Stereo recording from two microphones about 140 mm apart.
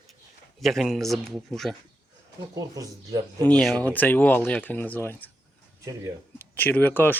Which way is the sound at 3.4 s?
5° left (ahead or behind).